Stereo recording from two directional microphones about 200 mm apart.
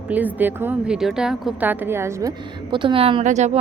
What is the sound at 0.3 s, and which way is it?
A woman's voice, 10° right (ahead or behind).